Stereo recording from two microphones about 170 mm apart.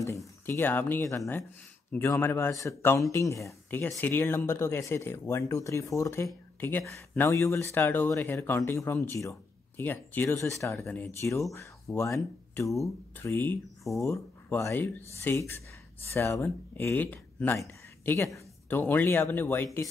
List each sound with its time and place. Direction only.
0.5 s speech: 10° left (ahead or behind)